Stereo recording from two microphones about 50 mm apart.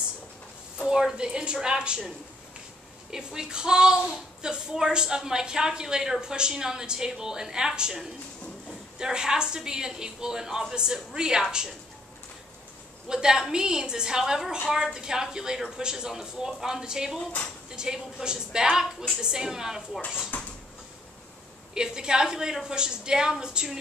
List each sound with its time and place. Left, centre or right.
0.8 s a woman's voice: centre
3.1 s a woman's voice: centre
13.1 s a woman's voice: centre
20.3 s a sound: left
21.7 s a woman's voice: centre